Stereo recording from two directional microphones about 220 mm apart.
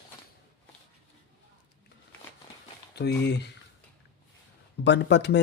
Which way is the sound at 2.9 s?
50° left (ahead or behind).